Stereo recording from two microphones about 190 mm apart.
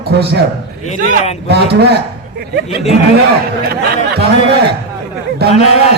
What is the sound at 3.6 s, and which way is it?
Speech, 60° right (ahead or behind).